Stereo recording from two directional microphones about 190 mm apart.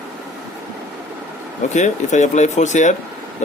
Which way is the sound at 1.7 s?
40° left (ahead or behind).